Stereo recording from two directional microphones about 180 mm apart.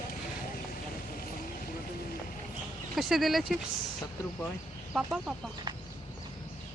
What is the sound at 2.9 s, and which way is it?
Speech, centre (ahead or behind).